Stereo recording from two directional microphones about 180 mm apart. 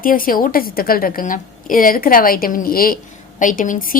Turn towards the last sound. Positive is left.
turn(degrees=50)  # may be behind; listen again after turning